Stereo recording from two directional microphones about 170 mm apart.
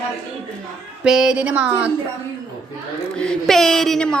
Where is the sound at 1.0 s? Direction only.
5° right (ahead or behind).